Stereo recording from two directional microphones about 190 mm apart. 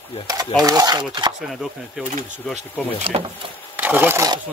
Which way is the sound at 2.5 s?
30° right (ahead or behind).